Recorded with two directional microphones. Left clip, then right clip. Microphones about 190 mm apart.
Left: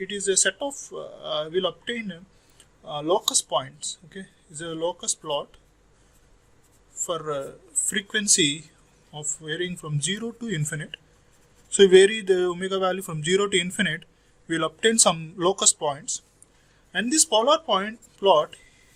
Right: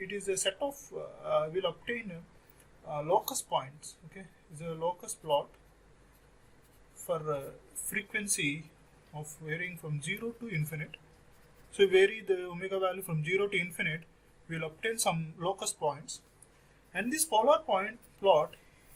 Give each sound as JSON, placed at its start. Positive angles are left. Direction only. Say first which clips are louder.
{"t": 0.1, "sound": "a man's voice", "louder": "left 10 dB", "side_deg": 55}
{"t": 4.7, "sound": "a man's voice", "louder": "left 7 dB", "side_deg": 50}
{"t": 7.1, "sound": "speech", "louder": "left 5 dB", "side_deg": 50}
{"t": 10.0, "sound": "speech", "louder": "left 8 dB", "side_deg": 50}
{"t": 11.8, "sound": "speech", "louder": "left 10 dB", "side_deg": 45}